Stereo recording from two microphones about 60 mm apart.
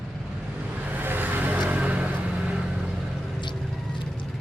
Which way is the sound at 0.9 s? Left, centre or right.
Right.